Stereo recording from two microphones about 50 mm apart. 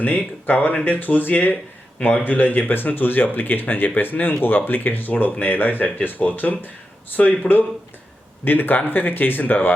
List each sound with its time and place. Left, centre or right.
0.0 s speech: left